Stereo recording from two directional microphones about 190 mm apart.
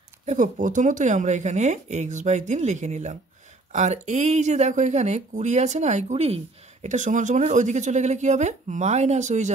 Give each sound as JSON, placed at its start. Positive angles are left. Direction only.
{"t": 0.3, "sound": "speech", "side_deg": -45}